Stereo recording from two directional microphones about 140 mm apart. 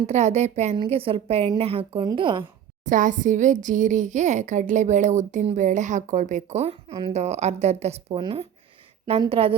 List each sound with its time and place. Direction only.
0.1 s a woman's voice: 55° right (ahead or behind)
0.9 s a woman's voice: 40° right (ahead or behind)
2.8 s a woman's voice: 65° right (ahead or behind); by 8.2 s 50° right (ahead or behind)
8.2 s a woman's voice: 40° right (ahead or behind)